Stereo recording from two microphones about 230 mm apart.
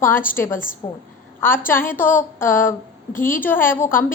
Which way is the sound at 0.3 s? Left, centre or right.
Centre.